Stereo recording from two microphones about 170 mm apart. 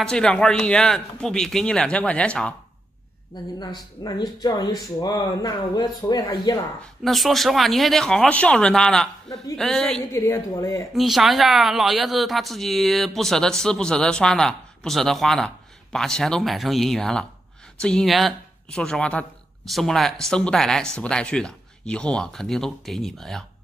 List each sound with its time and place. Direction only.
0.0 s speech: 5° left (ahead or behind)
3.5 s speech: 25° left (ahead or behind)
7.0 s speech: centre (ahead or behind)
10.1 s a woman's voice: 15° left (ahead or behind)
11.0 s speech: centre (ahead or behind)